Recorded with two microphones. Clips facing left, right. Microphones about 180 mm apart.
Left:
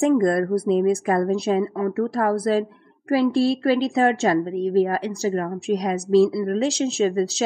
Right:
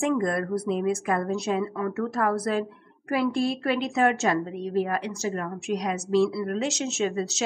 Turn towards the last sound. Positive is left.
turn(degrees=35)  # may be behind; listen again after turning